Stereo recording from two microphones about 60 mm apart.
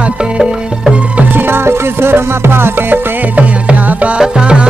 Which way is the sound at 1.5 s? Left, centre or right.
Right.